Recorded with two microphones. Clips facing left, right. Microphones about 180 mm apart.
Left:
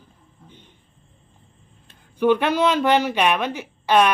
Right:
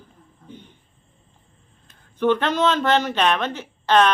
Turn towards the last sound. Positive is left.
turn(degrees=10)  # may be behind; listen again after turning